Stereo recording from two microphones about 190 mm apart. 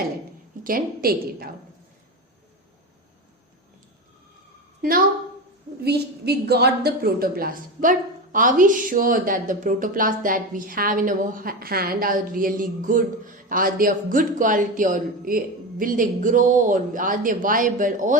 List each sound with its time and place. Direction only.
0.6 s a woman's voice: 50° right (ahead or behind)
4.8 s a woman's voice: 45° right (ahead or behind)